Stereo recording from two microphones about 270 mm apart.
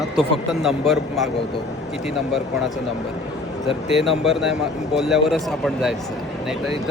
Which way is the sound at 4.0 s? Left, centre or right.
Centre.